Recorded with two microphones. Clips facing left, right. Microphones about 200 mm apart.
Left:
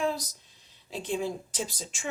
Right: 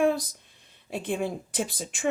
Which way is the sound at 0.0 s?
55° right (ahead or behind).